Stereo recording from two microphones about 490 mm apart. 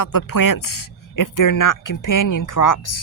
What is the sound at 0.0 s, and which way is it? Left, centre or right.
Speech, left.